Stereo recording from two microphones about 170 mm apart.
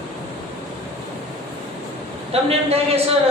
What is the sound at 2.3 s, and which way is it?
Speech, 35° right (ahead or behind).